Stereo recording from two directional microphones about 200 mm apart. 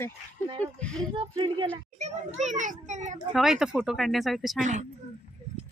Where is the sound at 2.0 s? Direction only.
35° right (ahead or behind).